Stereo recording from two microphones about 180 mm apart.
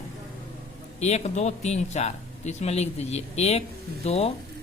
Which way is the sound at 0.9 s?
40° left (ahead or behind).